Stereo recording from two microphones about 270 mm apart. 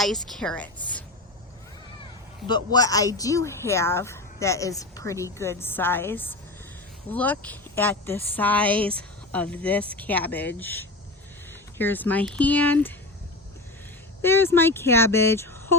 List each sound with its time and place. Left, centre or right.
0.0 s a woman's voice: centre
2.7 s a woman's voice: centre
14.2 s a woman's voice: centre